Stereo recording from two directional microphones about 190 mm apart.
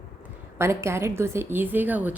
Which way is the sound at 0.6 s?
15° right (ahead or behind).